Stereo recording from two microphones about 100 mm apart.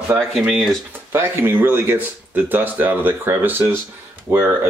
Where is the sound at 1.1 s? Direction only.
20° right (ahead or behind).